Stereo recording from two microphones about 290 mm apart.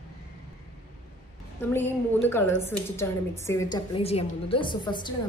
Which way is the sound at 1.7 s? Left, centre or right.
Centre.